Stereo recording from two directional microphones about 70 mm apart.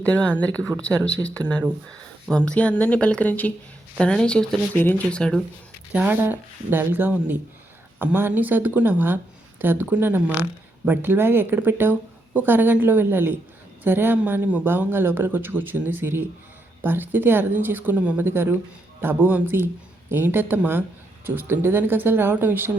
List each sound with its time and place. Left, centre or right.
0.0 s a woman's voice: centre
4.8 s a woman's voice: left
5.0 s speech: centre
6.1 s a woman's voice: right